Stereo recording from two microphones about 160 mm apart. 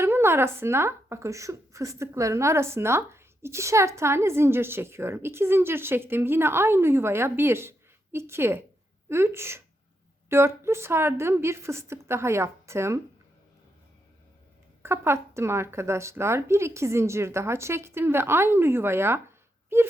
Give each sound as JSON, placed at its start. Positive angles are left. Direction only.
{"t": 0.0, "sound": "a woman's voice", "side_deg": -15}
{"t": 14.8, "sound": "a woman's voice", "side_deg": -15}